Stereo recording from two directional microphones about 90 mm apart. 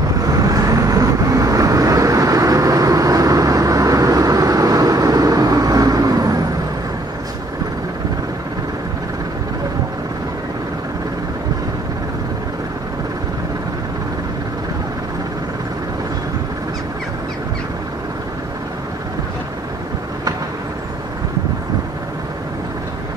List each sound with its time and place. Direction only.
0.2 s vehicle: 40° right (ahead or behind)